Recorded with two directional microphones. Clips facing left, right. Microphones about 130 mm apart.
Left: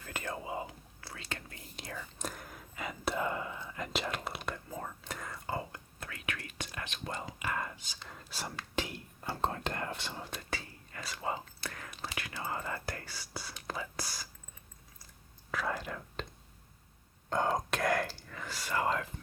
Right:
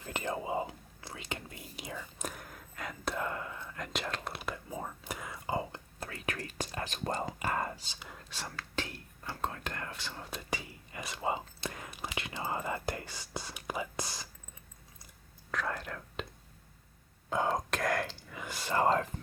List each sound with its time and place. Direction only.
0.0 s whispering: 20° right (ahead or behind)
5.5 s whispering: 30° right (ahead or behind)
7.9 s whispering: 5° right (ahead or behind)
8.3 s whispering: 10° left (ahead or behind)
9.2 s whispering: 30° left (ahead or behind)
10.2 s whispering: 5° left (ahead or behind)
10.5 s whispering: 15° right (ahead or behind)
15.5 s whispering: 5° left (ahead or behind)
17.2 s whispering: 5° right (ahead or behind)
18.3 s whispering: 15° right (ahead or behind)
18.7 s whispering: 35° right (ahead or behind)